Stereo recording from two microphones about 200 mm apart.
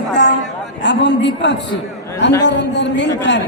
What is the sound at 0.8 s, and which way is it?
A woman's voice, 60° left (ahead or behind).